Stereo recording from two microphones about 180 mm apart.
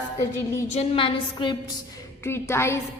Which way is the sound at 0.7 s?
30° left (ahead or behind).